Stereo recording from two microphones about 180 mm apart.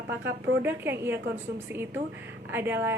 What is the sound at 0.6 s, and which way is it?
A woman's voice, 10° right (ahead or behind).